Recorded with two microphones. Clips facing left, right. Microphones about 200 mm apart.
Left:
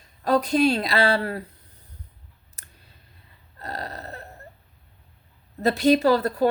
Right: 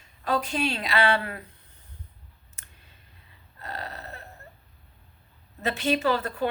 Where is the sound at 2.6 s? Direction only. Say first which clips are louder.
Left 2 dB; 35° left (ahead or behind).